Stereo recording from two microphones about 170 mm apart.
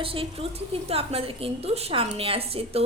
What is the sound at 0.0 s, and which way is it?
A woman's voice, 30° right (ahead or behind).